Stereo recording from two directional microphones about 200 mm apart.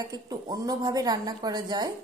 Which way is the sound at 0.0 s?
20° right (ahead or behind).